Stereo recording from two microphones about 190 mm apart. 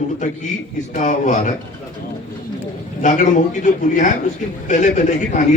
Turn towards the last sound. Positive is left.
turn(degrees=40)  # may be behind; listen again after turning